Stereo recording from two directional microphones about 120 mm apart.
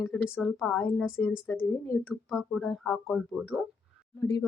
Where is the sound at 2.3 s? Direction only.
Centre (ahead or behind).